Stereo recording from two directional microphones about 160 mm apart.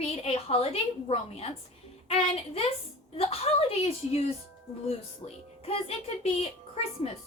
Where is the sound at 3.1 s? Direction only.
40° left (ahead or behind).